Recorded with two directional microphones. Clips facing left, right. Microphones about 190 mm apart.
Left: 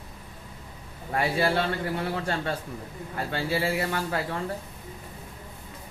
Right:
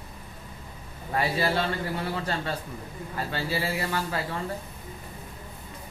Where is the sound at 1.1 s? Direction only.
55° left (ahead or behind).